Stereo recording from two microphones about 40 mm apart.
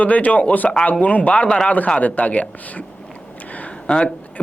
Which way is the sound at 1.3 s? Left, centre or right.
Left.